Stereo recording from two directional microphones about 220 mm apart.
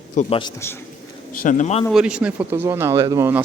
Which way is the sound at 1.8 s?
5° right (ahead or behind).